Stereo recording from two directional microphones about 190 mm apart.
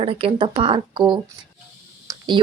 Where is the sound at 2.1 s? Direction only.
25° right (ahead or behind).